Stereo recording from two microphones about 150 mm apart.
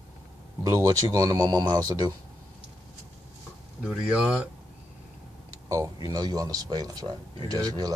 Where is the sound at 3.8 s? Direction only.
5° right (ahead or behind).